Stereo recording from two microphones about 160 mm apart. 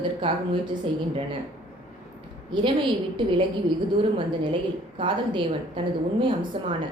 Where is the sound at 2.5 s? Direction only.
30° right (ahead or behind).